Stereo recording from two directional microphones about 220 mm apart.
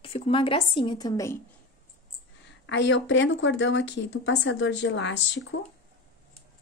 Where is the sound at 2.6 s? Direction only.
55° left (ahead or behind).